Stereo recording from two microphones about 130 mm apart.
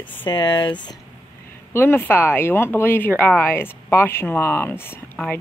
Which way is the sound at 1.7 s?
15° left (ahead or behind).